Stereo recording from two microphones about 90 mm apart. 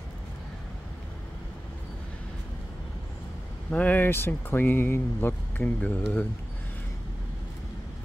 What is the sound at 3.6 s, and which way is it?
Speech, 15° left (ahead or behind).